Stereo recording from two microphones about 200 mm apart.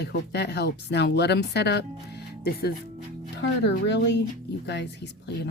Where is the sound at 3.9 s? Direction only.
60° left (ahead or behind).